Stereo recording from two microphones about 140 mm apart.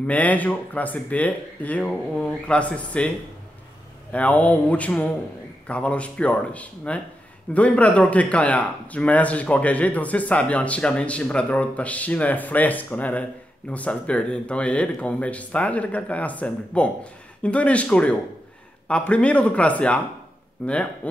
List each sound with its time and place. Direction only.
0.0 s a man's voice: 10° left (ahead or behind)
4.1 s a man's voice: 10° left (ahead or behind)